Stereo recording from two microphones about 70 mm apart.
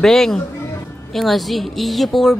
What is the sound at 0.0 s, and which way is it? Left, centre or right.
Speech, centre.